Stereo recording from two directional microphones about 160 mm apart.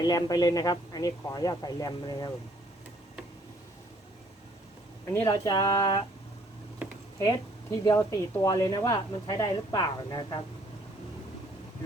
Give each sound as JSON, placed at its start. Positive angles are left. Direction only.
{"t": 0.0, "sound": "speech", "side_deg": 25}
{"t": 5.0, "sound": "speech", "side_deg": 20}
{"t": 6.8, "sound": "a sound", "side_deg": -10}
{"t": 7.9, "sound": "speech", "side_deg": 20}